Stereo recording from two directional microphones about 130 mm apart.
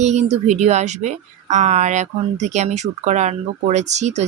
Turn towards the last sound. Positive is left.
turn(degrees=-60)  # may be behind; listen again after turning